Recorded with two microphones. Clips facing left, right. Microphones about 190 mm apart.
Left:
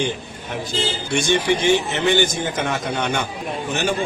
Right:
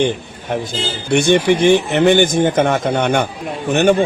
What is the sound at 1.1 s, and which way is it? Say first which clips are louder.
A man's voice: right 7 dB; 55° right (ahead or behind).